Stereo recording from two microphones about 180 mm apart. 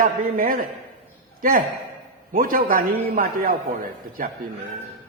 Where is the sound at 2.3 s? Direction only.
50° right (ahead or behind).